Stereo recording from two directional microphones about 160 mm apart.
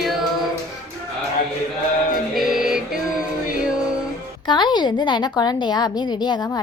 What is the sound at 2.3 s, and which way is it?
Music, 5° right (ahead or behind).